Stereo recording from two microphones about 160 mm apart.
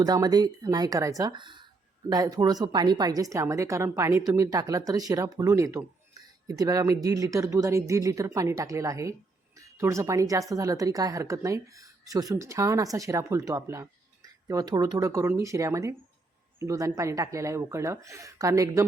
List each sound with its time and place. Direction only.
0.0 s speech: 25° right (ahead or behind)